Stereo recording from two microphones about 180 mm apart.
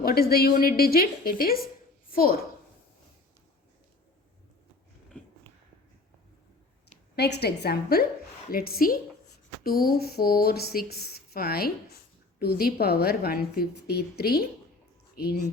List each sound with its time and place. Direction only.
0.0 s a woman's voice: 55° left (ahead or behind)
7.2 s a woman's voice: 65° left (ahead or behind)
15.1 s a sound: 60° left (ahead or behind)